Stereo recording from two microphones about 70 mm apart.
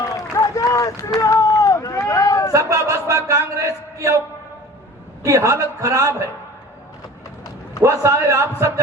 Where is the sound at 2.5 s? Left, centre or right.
Right.